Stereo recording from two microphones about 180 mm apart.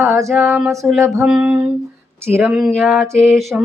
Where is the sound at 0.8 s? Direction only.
Centre (ahead or behind).